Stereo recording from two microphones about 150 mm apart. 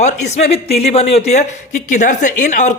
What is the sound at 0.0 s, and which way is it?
Speech, 50° left (ahead or behind).